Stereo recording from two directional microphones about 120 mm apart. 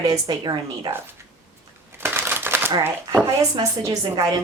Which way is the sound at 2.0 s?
15° right (ahead or behind).